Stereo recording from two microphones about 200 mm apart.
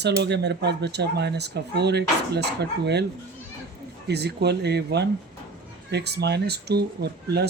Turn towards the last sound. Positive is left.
turn(degrees=-55)  # may be behind; listen again after turning